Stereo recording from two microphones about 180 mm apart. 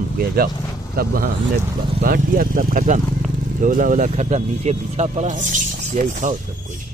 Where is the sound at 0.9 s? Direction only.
55° right (ahead or behind).